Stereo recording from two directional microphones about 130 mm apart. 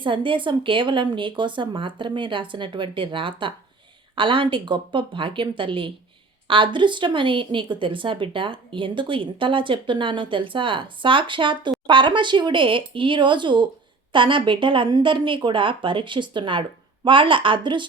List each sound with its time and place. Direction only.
0.0 s a woman's voice: 40° right (ahead or behind)